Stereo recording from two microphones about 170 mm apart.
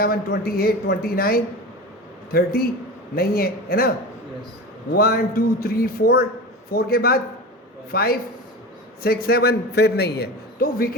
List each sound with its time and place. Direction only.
0.0 s a man's voice: 65° left (ahead or behind)